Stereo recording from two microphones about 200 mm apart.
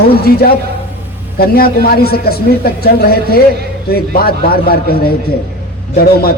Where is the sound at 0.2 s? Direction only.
50° left (ahead or behind).